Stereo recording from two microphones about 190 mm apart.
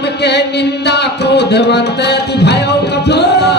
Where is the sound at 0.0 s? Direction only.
60° left (ahead or behind).